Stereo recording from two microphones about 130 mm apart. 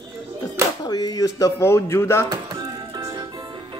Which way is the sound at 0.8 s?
30° left (ahead or behind).